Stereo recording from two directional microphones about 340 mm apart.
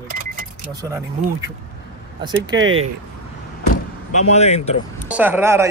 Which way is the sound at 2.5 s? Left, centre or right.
Centre.